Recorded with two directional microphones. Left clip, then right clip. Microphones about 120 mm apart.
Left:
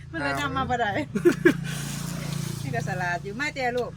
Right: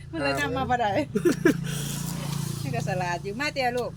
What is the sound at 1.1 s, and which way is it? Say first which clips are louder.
Speech: left 2 dB; 35° left (ahead or behind).